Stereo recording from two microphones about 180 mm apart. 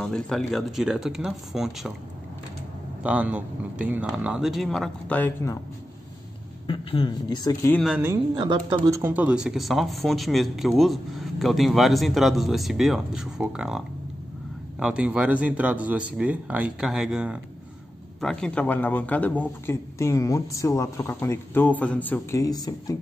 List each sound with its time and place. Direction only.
0.0 s speech: 5° left (ahead or behind)
3.0 s speech: 5° right (ahead or behind); by 5.6 s 10° left (ahead or behind)
6.7 s speech: 30° left (ahead or behind)
7.8 s a man's voice: 10° right (ahead or behind); by 22.9 s 20° left (ahead or behind)